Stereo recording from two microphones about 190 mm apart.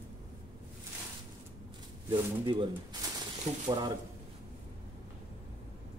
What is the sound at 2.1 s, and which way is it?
Speech, 25° right (ahead or behind).